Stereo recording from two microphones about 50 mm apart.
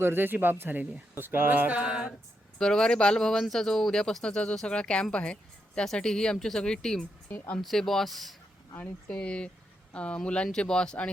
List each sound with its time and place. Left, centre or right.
0.0 s speech: right
1.8 s a sound: centre
2.6 s a woman's voice: centre
5.8 s speech: centre
7.3 s speech: left
7.6 s speech: centre
9.1 s speech: left